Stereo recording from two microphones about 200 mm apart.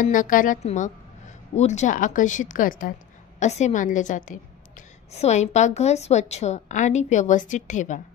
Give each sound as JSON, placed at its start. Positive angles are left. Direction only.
{"t": 0.0, "sound": "a woman's voice", "side_deg": 40}